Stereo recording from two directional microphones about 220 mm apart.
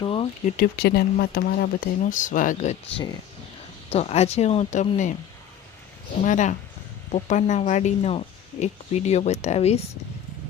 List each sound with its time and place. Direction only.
0.0 s speech: 25° left (ahead or behind)
0.5 s speech: 45° left (ahead or behind)
6.2 s speech: 35° left (ahead or behind)